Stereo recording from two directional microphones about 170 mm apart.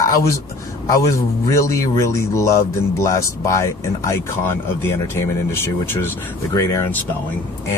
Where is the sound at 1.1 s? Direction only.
20° left (ahead or behind).